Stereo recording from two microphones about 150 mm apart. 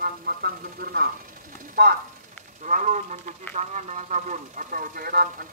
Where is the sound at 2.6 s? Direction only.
60° right (ahead or behind); by 5.2 s 75° right (ahead or behind).